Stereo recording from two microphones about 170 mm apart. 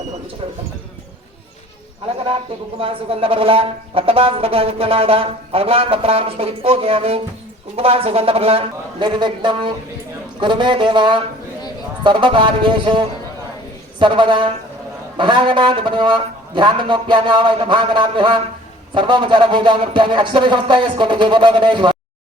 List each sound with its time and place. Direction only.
2.8 s speech: 30° right (ahead or behind)